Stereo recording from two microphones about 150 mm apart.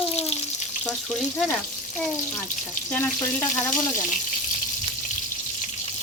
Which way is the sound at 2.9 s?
15° left (ahead or behind).